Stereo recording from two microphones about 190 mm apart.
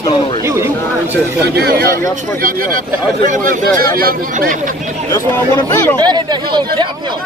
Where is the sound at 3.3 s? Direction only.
45° right (ahead or behind).